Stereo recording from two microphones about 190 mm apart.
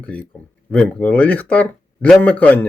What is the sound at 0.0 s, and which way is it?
Speech, 5° left (ahead or behind).